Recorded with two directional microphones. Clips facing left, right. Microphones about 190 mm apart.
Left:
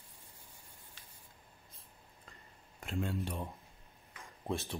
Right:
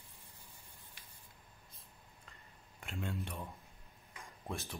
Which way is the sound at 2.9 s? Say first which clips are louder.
Left 5 dB; 35° left (ahead or behind).